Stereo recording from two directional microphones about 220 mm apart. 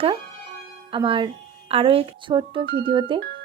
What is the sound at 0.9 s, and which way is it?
Speech, 25° right (ahead or behind).